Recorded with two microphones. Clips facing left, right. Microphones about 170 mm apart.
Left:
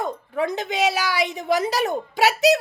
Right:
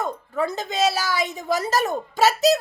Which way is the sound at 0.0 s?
15° left (ahead or behind).